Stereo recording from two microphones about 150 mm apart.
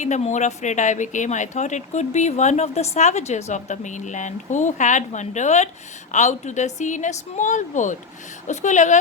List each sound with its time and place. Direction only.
0.0 s a woman's voice: 50° left (ahead or behind)